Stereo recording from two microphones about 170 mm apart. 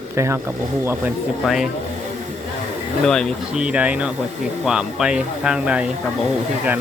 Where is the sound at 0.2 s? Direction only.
15° right (ahead or behind).